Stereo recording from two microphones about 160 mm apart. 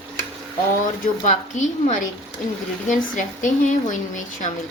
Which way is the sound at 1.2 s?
50° left (ahead or behind).